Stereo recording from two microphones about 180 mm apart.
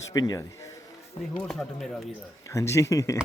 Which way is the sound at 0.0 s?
20° left (ahead or behind).